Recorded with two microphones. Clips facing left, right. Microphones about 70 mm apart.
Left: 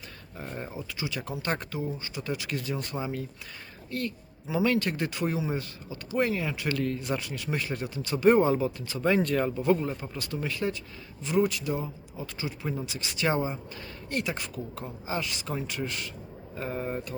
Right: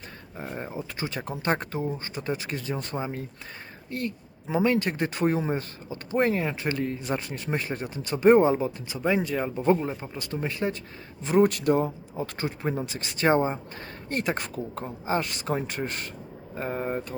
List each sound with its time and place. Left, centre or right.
0.3 s speech: right
0.9 s speech: right; by 9.5 s centre
9.6 s speech: right
11.4 s speech: right
16.6 s speech: right